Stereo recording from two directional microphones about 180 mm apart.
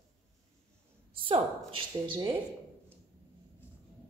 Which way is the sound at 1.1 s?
30° right (ahead or behind).